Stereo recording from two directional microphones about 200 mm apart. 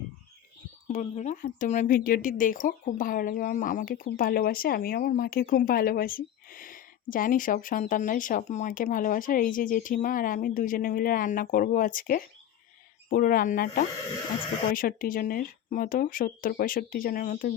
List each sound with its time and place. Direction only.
0.9 s speech: 35° left (ahead or behind)